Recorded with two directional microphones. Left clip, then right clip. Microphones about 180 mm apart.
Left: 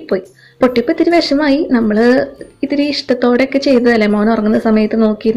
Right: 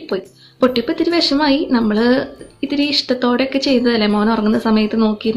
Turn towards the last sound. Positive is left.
turn(degrees=15)  # may be behind; listen again after turning